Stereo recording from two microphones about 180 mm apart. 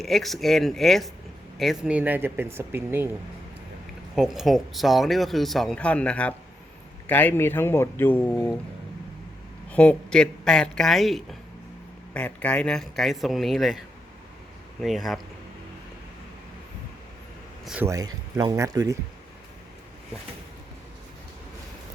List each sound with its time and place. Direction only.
0.0 s speech: centre (ahead or behind)
4.1 s speech: centre (ahead or behind)
9.7 s speech: 5° left (ahead or behind)
17.8 s speech: 20° right (ahead or behind)